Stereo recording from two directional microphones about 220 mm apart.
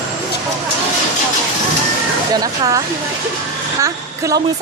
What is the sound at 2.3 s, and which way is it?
A woman's voice, 15° right (ahead or behind).